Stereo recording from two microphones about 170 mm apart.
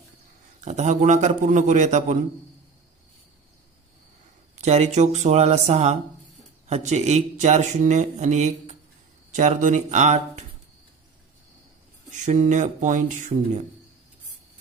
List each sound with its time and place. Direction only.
0.6 s speech: 45° right (ahead or behind)
4.5 s speech: 40° right (ahead or behind)
12.1 s speech: 45° right (ahead or behind)